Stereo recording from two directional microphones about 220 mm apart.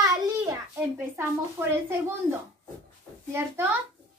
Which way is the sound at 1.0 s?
10° right (ahead or behind).